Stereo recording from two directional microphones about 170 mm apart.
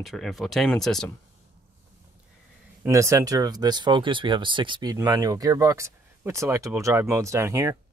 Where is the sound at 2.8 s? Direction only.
15° right (ahead or behind).